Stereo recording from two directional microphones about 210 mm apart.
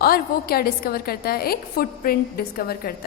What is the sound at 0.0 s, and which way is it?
A woman's voice, 45° left (ahead or behind).